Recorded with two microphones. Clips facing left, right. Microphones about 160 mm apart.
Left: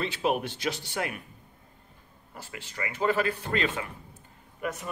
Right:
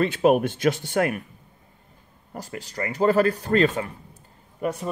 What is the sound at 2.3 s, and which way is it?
Speech, 40° right (ahead or behind).